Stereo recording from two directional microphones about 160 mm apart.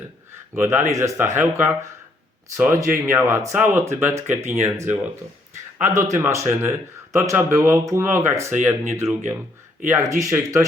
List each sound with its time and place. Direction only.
0.5 s speech: 15° right (ahead or behind)